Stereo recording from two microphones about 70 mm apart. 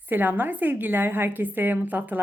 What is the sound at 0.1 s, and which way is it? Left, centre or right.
A woman's voice, right.